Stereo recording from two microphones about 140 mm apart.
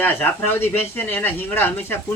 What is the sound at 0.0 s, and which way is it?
Speech, 15° left (ahead or behind).